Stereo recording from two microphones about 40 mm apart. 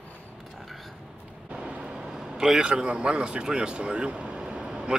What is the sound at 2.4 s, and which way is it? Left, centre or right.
Speech, centre.